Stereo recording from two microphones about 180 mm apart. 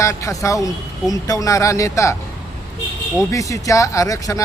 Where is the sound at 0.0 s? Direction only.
15° left (ahead or behind).